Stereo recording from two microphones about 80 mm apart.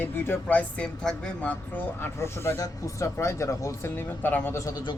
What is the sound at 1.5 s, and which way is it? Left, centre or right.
Speech, left.